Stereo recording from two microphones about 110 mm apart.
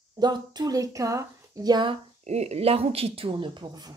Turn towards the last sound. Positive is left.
turn(degrees=-40)  # may be behind; listen again after turning